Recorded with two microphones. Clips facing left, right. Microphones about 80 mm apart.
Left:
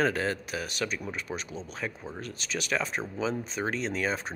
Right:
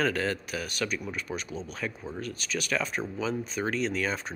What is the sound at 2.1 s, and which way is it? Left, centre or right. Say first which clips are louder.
Speech: right 2 dB; left.